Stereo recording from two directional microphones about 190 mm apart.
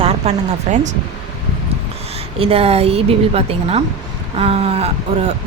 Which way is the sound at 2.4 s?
30° right (ahead or behind).